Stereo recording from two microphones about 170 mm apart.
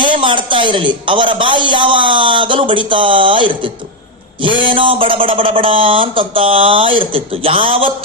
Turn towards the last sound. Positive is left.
turn(degrees=-30)  # may be behind; listen again after turning